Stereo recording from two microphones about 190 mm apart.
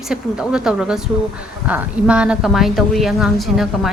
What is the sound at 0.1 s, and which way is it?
A woman's voice, 5° right (ahead or behind).